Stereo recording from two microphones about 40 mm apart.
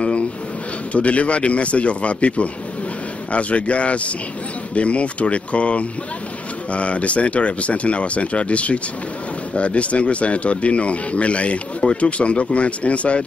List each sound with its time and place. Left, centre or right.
0.9 s speech: left